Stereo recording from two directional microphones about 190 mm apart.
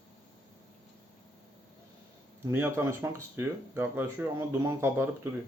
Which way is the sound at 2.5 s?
15° right (ahead or behind).